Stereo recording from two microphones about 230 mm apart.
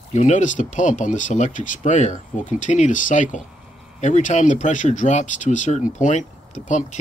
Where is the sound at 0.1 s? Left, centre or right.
Left.